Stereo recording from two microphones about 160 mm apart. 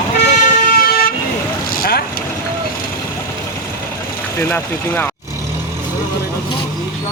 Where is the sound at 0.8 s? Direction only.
70° left (ahead or behind).